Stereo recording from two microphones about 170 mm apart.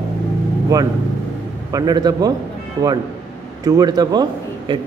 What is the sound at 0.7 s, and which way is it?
A man's voice, 20° right (ahead or behind).